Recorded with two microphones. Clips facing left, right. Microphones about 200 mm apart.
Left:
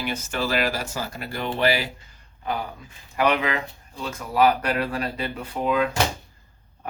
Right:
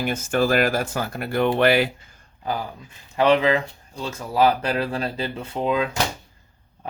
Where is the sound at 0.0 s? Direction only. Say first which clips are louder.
Right 6 dB; 50° right (ahead or behind).